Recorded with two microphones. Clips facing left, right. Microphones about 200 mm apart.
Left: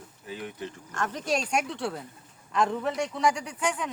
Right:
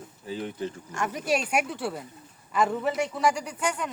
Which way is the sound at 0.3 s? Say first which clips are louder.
Right 5 dB; 30° right (ahead or behind).